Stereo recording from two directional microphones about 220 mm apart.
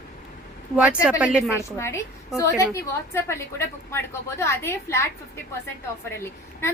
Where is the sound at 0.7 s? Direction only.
5° right (ahead or behind).